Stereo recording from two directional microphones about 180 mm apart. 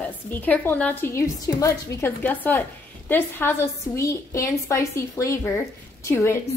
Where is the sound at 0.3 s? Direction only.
10° left (ahead or behind).